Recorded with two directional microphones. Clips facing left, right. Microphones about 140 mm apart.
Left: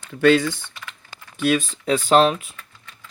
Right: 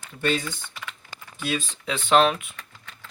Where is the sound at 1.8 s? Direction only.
40° left (ahead or behind).